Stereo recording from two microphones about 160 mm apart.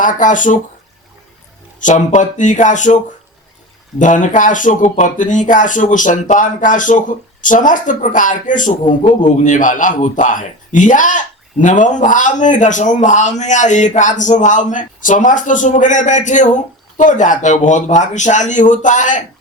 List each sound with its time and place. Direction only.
0.0 s a man's voice: 55° left (ahead or behind)
1.8 s a man's voice: 50° left (ahead or behind)